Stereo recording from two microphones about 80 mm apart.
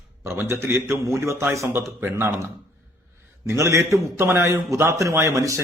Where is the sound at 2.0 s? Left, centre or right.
Right.